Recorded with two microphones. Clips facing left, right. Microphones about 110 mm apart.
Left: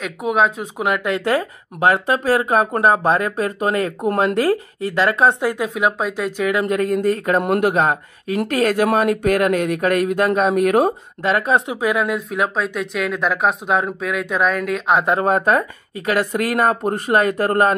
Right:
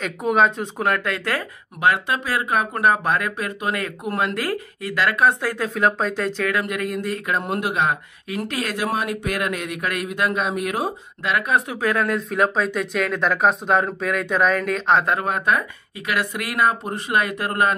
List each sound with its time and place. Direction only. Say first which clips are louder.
0.0 s speech: left 1 dB; 5° left (ahead or behind); by 1.4 s 20° left (ahead or behind)
1.8 s speech: left 4 dB; 35° left (ahead or behind); by 5.7 s 20° left (ahead or behind)
5.8 s speech: right 3 dB; 10° left (ahead or behind)
6.6 s speech: left 7 dB; 35° left (ahead or behind)
7.4 s speech: left 7 dB; 60° left (ahead or behind)
7.7 s speech: left 4 dB; 40° left (ahead or behind)
11.2 s speech: left 4 dB; 30° left (ahead or behind); by 15.0 s centre (ahead or behind)
15.1 s speech: left 5 dB; 35° left (ahead or behind)